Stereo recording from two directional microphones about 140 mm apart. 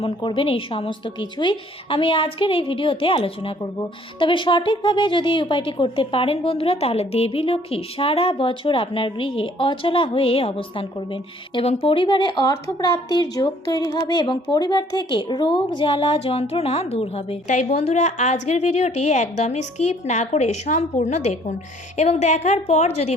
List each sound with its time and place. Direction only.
0.0 s a woman's voice: 35° left (ahead or behind)